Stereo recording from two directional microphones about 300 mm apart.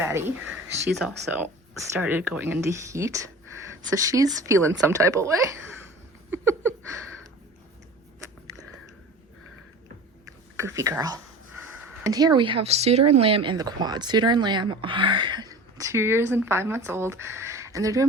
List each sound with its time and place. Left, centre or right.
0.0 s speech: centre
6.3 s a sound: centre
10.6 s speech: centre